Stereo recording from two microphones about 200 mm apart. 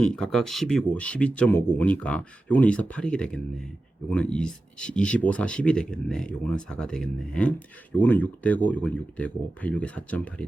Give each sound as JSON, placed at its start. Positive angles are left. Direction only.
{"t": 0.0, "sound": "speech", "side_deg": 5}